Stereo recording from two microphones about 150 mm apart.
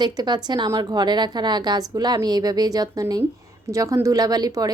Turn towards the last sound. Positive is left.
turn(degrees=-25)  # may be behind; listen again after turning